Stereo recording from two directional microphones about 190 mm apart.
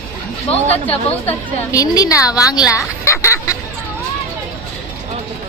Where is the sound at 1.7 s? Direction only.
20° left (ahead or behind).